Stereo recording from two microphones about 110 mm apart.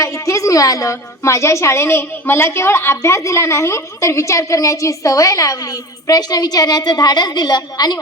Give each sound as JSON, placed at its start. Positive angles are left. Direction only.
{"t": 0.0, "sound": "a woman's voice", "side_deg": 30}